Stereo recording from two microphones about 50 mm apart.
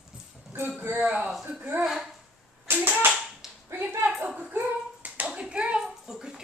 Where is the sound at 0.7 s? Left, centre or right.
Right.